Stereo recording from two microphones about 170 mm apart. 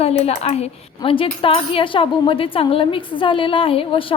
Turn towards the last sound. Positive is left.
turn(degrees=30)  # may be behind; listen again after turning